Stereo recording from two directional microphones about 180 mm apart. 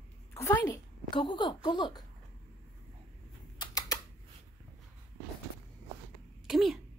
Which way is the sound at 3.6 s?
20° left (ahead or behind).